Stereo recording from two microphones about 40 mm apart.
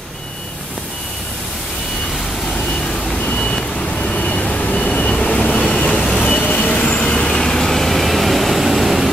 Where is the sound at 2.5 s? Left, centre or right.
Left.